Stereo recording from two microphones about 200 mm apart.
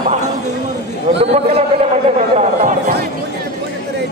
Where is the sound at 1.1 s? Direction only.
30° right (ahead or behind).